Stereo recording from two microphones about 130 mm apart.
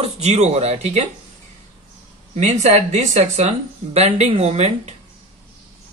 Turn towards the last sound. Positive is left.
turn(degrees=-55)  # may be behind; listen again after turning